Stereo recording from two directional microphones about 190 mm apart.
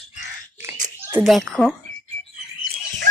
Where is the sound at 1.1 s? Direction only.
10° right (ahead or behind).